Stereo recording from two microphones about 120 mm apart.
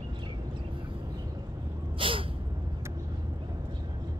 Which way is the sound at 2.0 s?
45° right (ahead or behind).